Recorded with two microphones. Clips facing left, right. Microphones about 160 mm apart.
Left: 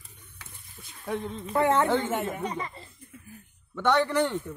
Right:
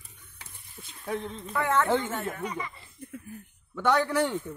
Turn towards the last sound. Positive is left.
turn(degrees=0)  # may be behind; listen again after turning